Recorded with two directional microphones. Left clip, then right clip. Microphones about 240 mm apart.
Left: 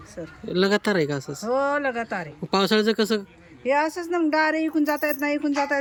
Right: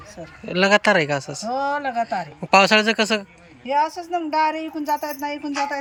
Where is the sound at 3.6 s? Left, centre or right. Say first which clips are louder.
Right 1 dB; left.